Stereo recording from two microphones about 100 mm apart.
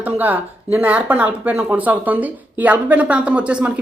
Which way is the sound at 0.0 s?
15° right (ahead or behind).